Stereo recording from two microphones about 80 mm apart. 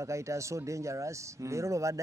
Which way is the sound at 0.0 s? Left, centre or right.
Right.